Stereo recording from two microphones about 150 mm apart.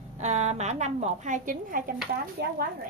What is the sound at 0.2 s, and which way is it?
A woman's voice, 50° right (ahead or behind).